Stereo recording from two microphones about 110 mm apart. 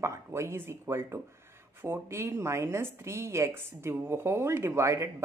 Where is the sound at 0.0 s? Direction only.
25° right (ahead or behind).